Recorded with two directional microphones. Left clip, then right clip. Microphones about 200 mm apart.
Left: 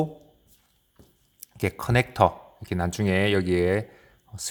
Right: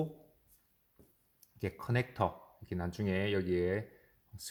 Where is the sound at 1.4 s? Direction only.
30° left (ahead or behind).